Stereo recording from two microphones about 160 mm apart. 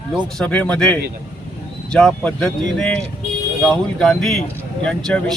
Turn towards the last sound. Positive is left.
turn(degrees=5)  # may be behind; listen again after turning